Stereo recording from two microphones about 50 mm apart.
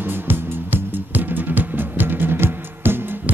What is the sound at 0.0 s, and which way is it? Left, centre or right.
Music, right.